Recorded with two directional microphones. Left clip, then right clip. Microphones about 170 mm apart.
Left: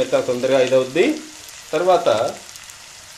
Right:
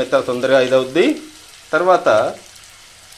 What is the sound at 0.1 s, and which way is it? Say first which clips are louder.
Speech: right 3 dB; 10° right (ahead or behind).